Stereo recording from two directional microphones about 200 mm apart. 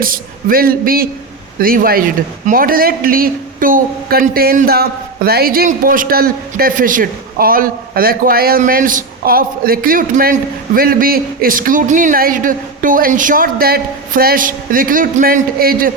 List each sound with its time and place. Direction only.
0.0 s a man's voice: 45° right (ahead or behind)